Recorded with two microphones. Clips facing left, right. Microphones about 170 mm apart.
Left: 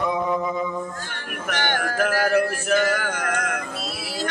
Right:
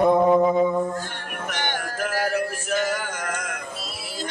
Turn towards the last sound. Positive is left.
turn(degrees=65)  # may be behind; listen again after turning